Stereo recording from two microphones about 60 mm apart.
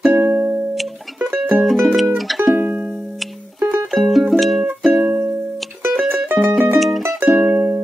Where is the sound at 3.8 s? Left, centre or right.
Centre.